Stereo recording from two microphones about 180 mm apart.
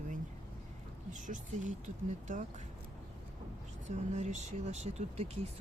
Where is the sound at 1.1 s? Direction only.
45° right (ahead or behind).